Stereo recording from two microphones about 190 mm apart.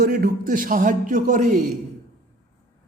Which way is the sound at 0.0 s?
50° right (ahead or behind).